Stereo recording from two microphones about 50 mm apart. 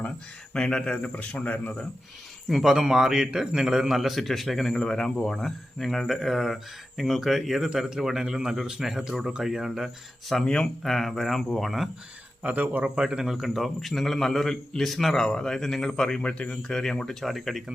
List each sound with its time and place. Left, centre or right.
0.5 s a man's voice: centre
2.5 s a man's voice: centre
10.4 s a man's voice: centre
12.4 s a man's voice: right
13.0 s a man's voice: centre